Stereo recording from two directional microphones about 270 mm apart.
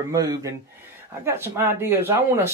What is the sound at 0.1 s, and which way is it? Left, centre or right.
Speech, centre.